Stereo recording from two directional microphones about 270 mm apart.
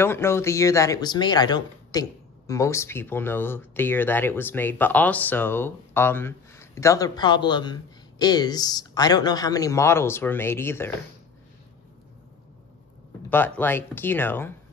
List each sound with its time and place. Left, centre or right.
0.0 s speech: centre
13.3 s speech: centre